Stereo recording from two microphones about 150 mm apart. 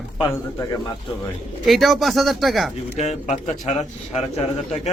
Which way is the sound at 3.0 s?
50° left (ahead or behind).